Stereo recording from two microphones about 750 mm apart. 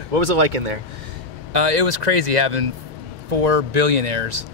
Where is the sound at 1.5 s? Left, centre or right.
Right.